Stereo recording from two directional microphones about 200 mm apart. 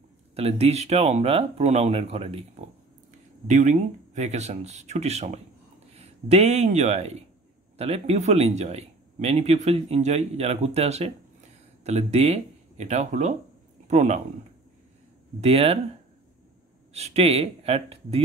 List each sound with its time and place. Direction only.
0.4 s speech: 30° right (ahead or behind)
15.4 s speech: 30° right (ahead or behind)
16.9 s speech: 30° right (ahead or behind)